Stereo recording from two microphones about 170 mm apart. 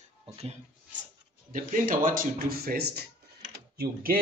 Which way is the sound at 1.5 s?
50° right (ahead or behind).